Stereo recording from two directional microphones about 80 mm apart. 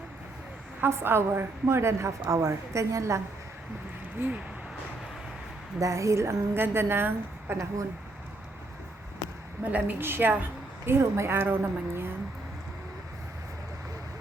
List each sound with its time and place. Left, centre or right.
0.8 s a woman's voice: right
4.2 s a woman's voice: right
5.8 s a woman's voice: right
9.6 s a woman's voice: centre